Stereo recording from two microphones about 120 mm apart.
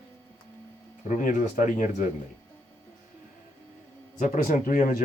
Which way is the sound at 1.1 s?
90° left.